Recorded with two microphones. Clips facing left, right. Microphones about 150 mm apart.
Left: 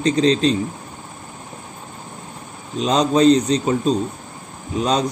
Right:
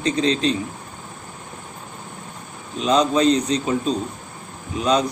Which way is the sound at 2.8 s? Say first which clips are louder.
Left 2 dB; 35° left (ahead or behind).